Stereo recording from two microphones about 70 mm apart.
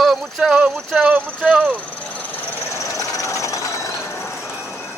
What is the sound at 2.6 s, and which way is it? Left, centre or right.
Vehicle, left.